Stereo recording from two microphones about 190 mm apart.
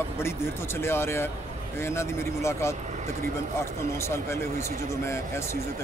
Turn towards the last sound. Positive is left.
turn(degrees=15)  # may be behind; listen again after turning